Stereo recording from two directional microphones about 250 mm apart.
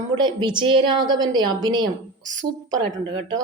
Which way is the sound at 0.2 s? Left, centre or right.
Centre.